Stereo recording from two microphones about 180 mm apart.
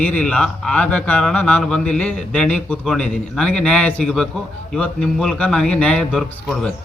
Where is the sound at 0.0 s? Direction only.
5° left (ahead or behind).